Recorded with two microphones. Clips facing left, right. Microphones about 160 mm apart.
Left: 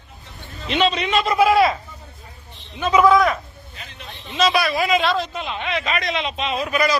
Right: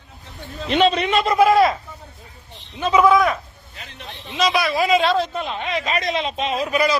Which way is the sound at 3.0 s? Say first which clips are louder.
Left 1 dB; centre (ahead or behind).